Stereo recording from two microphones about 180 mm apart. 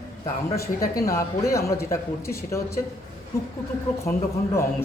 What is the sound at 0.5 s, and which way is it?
Speech, 15° left (ahead or behind).